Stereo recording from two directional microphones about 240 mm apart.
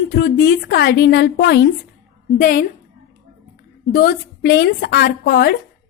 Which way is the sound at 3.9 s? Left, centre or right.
Left.